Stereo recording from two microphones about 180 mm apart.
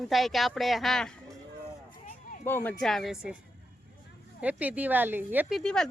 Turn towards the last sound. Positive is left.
turn(degrees=5)  # may be behind; listen again after turning